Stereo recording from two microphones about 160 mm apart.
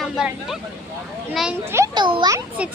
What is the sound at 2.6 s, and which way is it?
Speech, 10° right (ahead or behind).